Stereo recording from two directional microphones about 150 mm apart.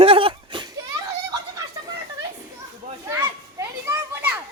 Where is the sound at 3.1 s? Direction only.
20° right (ahead or behind).